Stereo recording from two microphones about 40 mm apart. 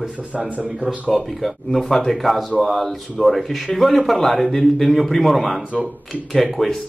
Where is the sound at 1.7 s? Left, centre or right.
Centre.